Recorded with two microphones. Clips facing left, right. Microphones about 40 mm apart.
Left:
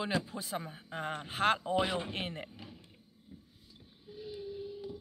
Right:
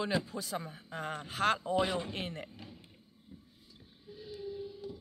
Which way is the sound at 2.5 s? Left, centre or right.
Centre.